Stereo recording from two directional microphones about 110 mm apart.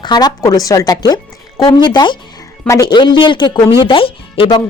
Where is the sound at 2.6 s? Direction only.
30° left (ahead or behind).